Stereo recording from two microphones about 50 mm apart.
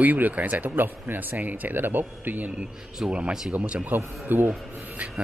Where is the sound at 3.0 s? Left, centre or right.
Right.